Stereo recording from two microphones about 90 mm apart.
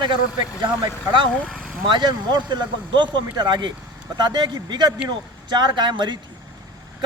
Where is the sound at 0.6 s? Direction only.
60° right (ahead or behind).